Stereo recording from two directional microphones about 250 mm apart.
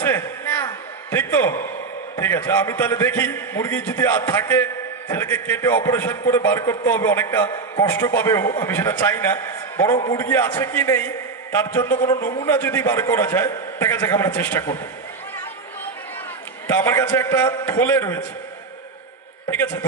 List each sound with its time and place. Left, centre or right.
0.0 s a sound: centre
2.1 s a man's voice: centre
16.6 s a man's voice: centre
19.5 s a man's voice: centre